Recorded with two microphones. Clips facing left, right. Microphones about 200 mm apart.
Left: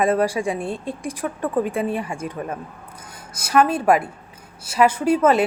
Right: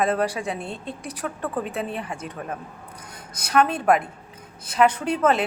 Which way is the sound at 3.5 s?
5° left (ahead or behind).